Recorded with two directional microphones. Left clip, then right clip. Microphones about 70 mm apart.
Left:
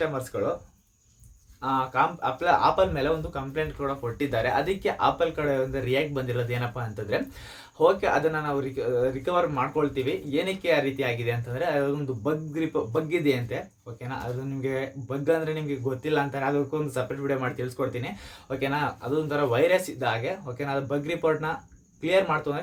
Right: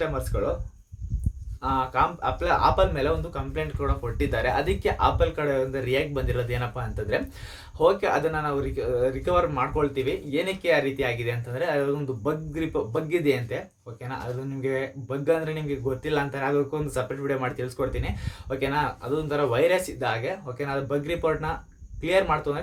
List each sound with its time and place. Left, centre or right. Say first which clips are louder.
0.0 s speech: even; centre
1.6 s speech: even; right